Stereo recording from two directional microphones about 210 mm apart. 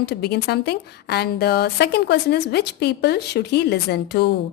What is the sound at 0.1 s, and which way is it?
A woman's voice, 50° left (ahead or behind).